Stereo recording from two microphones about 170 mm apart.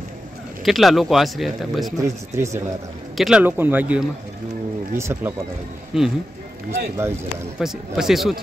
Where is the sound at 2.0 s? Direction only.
15° right (ahead or behind).